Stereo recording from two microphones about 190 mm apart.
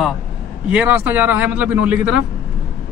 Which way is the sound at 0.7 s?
10° right (ahead or behind).